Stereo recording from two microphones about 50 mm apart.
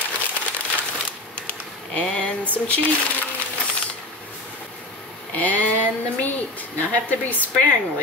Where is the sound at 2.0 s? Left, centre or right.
Left.